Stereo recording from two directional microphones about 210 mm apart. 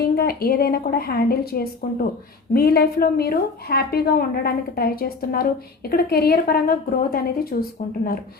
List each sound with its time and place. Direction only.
0.0 s a woman's voice: 45° left (ahead or behind)